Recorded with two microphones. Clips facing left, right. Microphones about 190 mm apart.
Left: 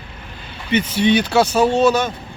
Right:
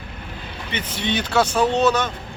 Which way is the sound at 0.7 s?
10° left (ahead or behind).